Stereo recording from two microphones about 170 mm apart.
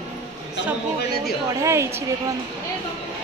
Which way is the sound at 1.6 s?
15° right (ahead or behind).